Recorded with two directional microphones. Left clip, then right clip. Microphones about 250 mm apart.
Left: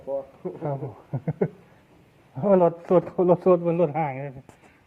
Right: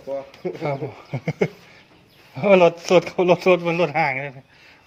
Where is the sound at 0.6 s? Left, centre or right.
Right.